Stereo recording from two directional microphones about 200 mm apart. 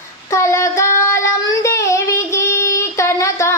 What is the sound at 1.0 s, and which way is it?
Singing, 15° left (ahead or behind).